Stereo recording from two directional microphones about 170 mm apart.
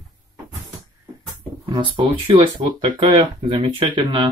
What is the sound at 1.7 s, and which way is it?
Speech, 30° right (ahead or behind).